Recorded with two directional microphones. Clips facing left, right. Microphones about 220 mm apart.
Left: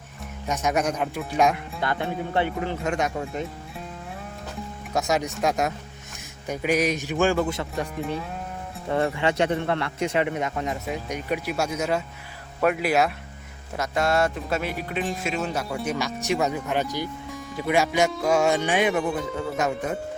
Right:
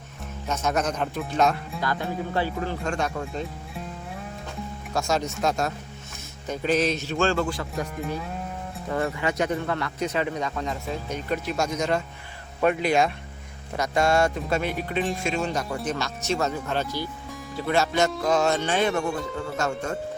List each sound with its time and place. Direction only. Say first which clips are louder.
0.4 s a man's voice: left 1 dB; 15° left (ahead or behind)
1.8 s a man's voice: left 1 dB; 25° left (ahead or behind)
4.9 s a man's voice: left 1 dB; 15° left (ahead or behind)
9.0 s a man's voice: left 3 dB; 30° left (ahead or behind)
19.0 s speech: left 2 dB; centre (ahead or behind)
19.5 s a man's voice: left 1 dB; 15° left (ahead or behind)